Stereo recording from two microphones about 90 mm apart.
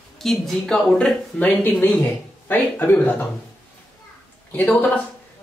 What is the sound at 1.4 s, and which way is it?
Speech, 20° left (ahead or behind).